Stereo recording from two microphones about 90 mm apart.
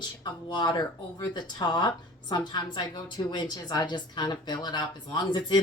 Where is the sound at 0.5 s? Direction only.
50° left (ahead or behind).